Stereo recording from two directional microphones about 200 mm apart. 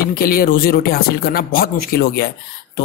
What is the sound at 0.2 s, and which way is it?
Speech, 45° left (ahead or behind).